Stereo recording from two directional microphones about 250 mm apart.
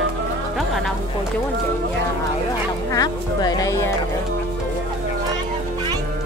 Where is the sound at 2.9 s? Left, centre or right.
Centre.